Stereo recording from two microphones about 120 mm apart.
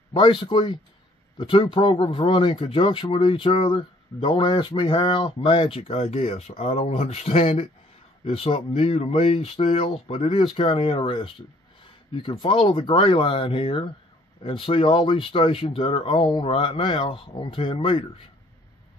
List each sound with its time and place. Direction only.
0.1 s speech: 45° left (ahead or behind)